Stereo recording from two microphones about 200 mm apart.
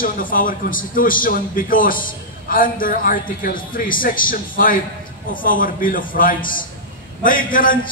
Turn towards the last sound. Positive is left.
turn(degrees=45)  # may be behind; listen again after turning